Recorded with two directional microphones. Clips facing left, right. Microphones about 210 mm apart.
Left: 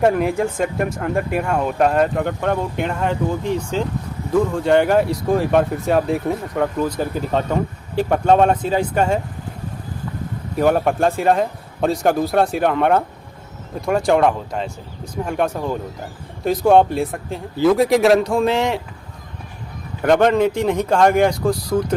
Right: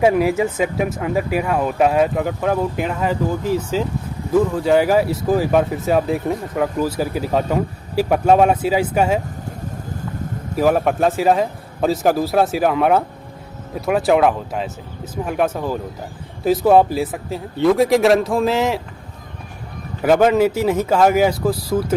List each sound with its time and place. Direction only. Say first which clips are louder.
0.0 s speech: right 1 dB; 5° right (ahead or behind)
10.5 s speech: even; centre (ahead or behind)
20.0 s speech: right 1 dB; 5° right (ahead or behind)